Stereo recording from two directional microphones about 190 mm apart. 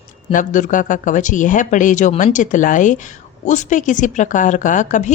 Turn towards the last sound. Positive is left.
turn(degrees=40)  # may be behind; listen again after turning